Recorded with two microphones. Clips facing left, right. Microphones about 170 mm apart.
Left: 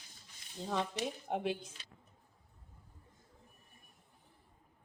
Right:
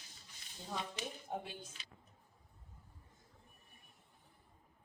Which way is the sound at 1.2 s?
85° left.